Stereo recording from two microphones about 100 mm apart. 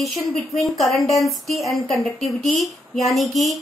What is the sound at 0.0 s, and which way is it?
A woman's voice, centre (ahead or behind).